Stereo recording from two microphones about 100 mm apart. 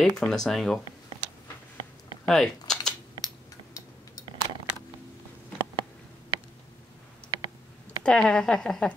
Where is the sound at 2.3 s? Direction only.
5° left (ahead or behind).